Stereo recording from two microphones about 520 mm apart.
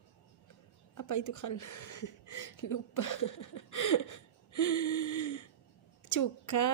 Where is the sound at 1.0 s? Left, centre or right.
Left.